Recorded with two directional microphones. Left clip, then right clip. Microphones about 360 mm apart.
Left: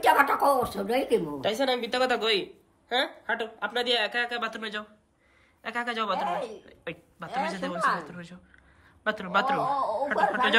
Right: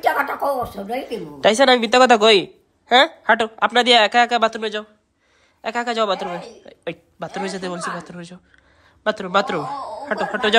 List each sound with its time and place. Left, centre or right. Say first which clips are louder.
0.0 s speech: right 2 dB; centre
1.4 s speech: right 13 dB; centre